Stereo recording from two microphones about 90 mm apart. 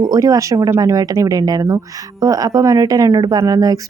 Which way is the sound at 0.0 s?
40° right (ahead or behind).